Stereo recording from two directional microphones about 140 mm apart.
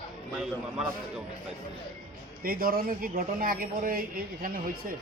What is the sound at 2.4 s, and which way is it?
Speech, 90° right.